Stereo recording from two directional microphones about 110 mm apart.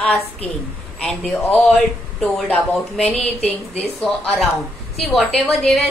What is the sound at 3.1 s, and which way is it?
Speech, 70° left (ahead or behind).